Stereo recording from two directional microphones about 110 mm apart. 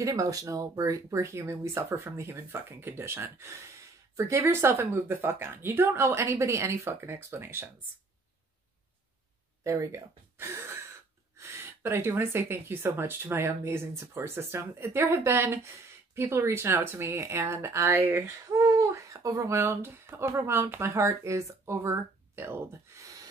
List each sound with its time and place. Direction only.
0.0 s speech: 30° right (ahead or behind)
9.6 s speech: 30° right (ahead or behind)
18.5 s speech: 30° right (ahead or behind)